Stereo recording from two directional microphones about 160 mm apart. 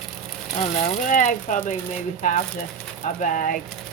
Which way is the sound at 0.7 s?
50° left (ahead or behind).